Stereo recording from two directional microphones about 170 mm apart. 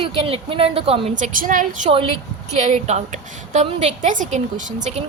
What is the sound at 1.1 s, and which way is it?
A woman's voice, 50° right (ahead or behind).